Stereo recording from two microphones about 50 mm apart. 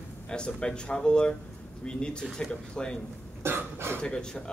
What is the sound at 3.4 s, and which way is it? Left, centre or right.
Speech, right.